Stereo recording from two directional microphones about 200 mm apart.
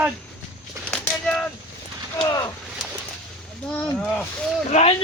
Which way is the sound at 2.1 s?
20° left (ahead or behind).